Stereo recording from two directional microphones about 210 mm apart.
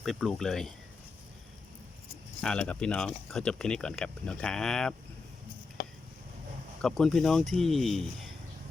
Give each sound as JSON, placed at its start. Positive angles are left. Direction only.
{"t": 0.0, "sound": "speech", "side_deg": 0}
{"t": 2.4, "sound": "speech", "side_deg": 5}
{"t": 5.8, "sound": "a sound", "side_deg": 45}
{"t": 6.8, "sound": "speech", "side_deg": 0}